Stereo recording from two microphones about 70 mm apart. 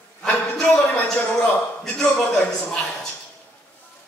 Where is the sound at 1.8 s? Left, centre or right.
Centre.